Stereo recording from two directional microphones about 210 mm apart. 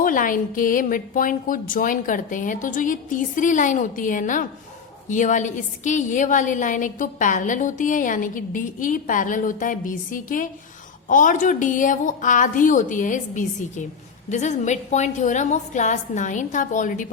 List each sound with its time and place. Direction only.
0.0 s a woman's voice: 40° left (ahead or behind)